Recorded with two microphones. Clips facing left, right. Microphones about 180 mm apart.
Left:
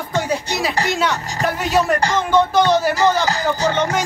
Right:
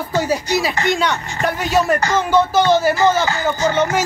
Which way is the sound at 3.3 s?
35° left (ahead or behind).